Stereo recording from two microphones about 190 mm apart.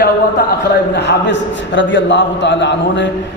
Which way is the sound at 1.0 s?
70° left (ahead or behind).